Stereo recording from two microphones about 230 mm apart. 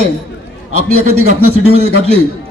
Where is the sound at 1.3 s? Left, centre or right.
Right.